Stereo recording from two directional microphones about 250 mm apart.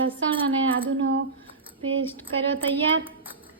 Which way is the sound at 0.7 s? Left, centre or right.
Right.